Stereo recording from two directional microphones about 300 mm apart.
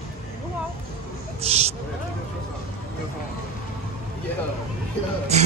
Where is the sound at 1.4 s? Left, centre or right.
Right.